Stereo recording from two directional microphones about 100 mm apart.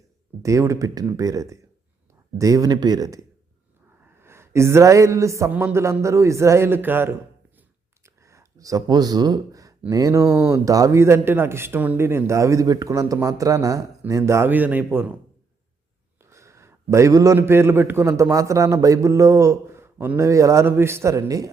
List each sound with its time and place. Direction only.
0.4 s a man's voice: 30° right (ahead or behind)
4.0 s speech: 25° right (ahead or behind)
5.5 s a man's voice: 15° right (ahead or behind)
5.7 s a man's voice: 25° right (ahead or behind)
8.0 s a sound: 30° right (ahead or behind)
9.9 s a man's voice: 35° right (ahead or behind)
14.5 s a man's voice: 15° right (ahead or behind)
16.2 s a sound: 30° right (ahead or behind)
17.3 s a man's voice: 25° right (ahead or behind)